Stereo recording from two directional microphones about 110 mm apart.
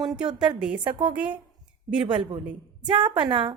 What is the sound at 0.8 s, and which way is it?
Speech, 50° right (ahead or behind).